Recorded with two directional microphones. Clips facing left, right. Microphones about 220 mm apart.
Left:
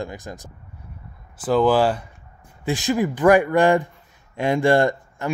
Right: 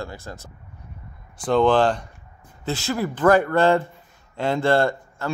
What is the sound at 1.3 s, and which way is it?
Speech, 5° left (ahead or behind).